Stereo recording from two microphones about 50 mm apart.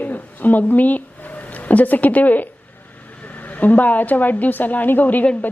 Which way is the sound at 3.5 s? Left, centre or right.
Left.